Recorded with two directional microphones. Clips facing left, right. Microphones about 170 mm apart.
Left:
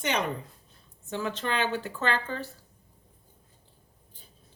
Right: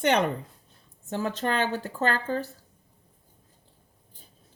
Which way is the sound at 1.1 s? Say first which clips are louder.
Right 3 dB; 45° right (ahead or behind).